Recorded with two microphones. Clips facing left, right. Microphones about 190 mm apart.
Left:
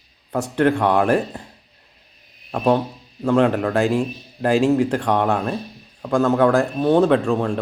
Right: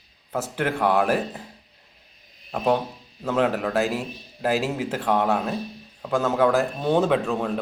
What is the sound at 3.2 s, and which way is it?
Speech, 5° right (ahead or behind).